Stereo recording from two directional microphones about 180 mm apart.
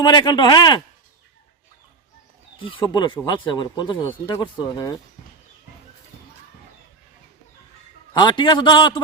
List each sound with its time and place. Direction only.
0.0 s speech: 25° left (ahead or behind)
2.6 s speech: 30° left (ahead or behind)
8.1 s speech: 25° left (ahead or behind)